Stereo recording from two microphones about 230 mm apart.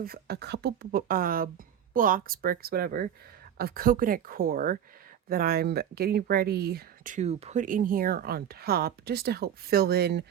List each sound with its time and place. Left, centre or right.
0.0 s speech: right